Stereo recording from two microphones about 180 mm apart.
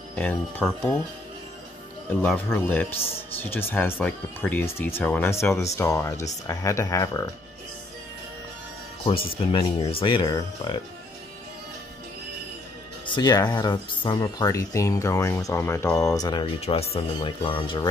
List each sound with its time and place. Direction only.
0.1 s speech: 10° left (ahead or behind)
2.0 s speech: 10° left (ahead or behind)
9.5 s speech: 30° left (ahead or behind)
13.0 s speech: 25° left (ahead or behind)